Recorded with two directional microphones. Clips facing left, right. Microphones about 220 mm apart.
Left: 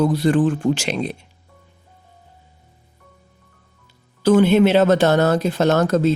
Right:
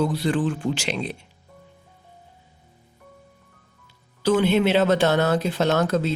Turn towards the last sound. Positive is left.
turn(degrees=45)  # may be behind; listen again after turning